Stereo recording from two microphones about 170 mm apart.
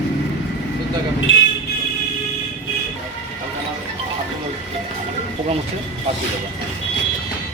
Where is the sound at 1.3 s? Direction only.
90° left.